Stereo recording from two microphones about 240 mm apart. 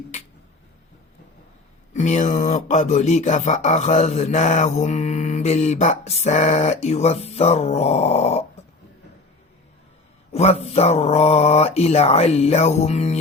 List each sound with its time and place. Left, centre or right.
1.9 s speech: left
10.3 s speech: left